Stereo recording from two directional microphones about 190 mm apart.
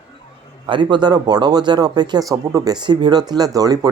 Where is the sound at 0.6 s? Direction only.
25° right (ahead or behind).